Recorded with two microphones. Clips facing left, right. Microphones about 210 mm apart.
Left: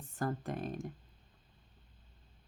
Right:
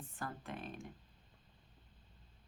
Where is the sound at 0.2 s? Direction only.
40° left (ahead or behind).